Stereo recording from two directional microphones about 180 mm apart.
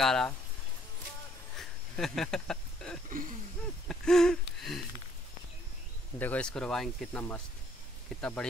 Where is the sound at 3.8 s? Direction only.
5° left (ahead or behind).